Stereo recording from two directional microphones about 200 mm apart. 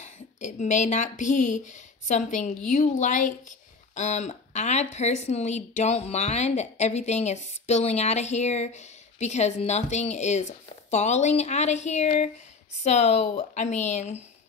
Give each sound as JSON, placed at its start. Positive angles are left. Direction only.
{"t": 0.0, "sound": "a woman's voice", "side_deg": 35}